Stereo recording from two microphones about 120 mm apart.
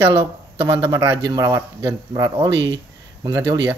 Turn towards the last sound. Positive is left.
turn(degrees=-30)  # may be behind; listen again after turning